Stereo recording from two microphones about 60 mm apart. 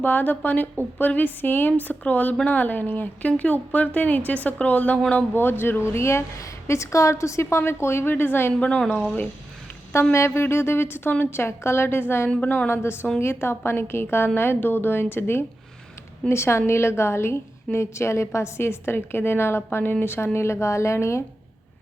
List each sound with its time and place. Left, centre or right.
0.0 s a woman's voice: left
7.6 s a woman's voice: left
9.9 s a woman's voice: left
12.4 s a woman's voice: left
12.7 s a woman's voice: left